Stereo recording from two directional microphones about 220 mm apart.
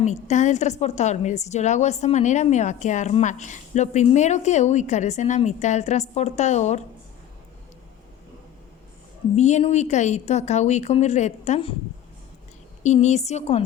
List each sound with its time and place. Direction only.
0.0 s a woman's voice: 30° left (ahead or behind)
9.3 s a woman's voice: 30° left (ahead or behind)
12.8 s a woman's voice: 30° left (ahead or behind)